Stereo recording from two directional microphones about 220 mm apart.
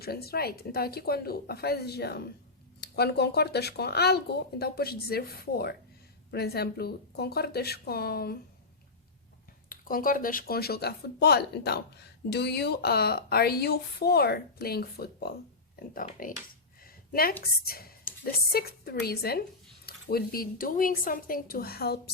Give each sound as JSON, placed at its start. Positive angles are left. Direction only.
{"t": 0.0, "sound": "speech", "side_deg": 45}
{"t": 9.6, "sound": "speech", "side_deg": 40}
{"t": 16.8, "sound": "a sound", "side_deg": 40}
{"t": 17.7, "sound": "a woman's voice", "side_deg": 45}